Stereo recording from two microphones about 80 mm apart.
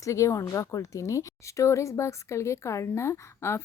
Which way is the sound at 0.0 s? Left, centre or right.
Left.